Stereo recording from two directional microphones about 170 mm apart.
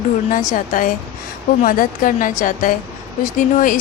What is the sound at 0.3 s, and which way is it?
A woman's voice, 50° left (ahead or behind).